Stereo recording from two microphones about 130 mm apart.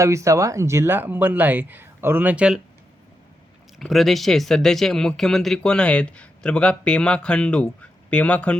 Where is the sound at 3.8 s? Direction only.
Centre (ahead or behind).